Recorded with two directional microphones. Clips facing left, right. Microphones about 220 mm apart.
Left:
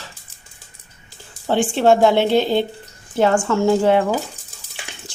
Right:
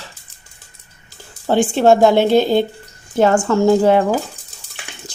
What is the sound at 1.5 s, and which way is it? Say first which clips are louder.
A woman's voice: right 3 dB; 40° right (ahead or behind).